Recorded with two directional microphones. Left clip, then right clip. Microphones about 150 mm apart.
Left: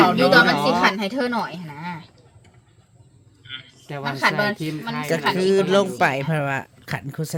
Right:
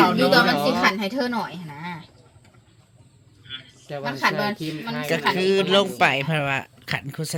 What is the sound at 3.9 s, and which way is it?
Speech, 90° left.